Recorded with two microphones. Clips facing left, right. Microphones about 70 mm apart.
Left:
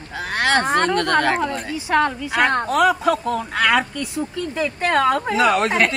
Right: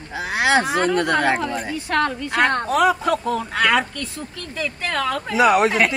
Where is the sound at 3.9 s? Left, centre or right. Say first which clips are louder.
Left 6 dB; centre.